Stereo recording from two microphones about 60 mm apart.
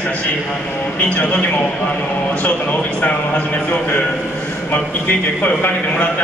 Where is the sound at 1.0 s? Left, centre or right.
Left.